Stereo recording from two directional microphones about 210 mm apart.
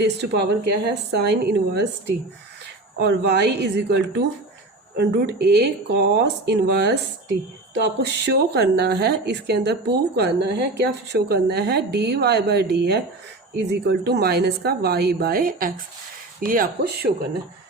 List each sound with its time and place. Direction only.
0.0 s a woman's voice: 55° right (ahead or behind)